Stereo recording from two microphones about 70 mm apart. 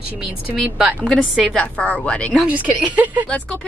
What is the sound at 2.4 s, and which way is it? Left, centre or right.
Speech, right.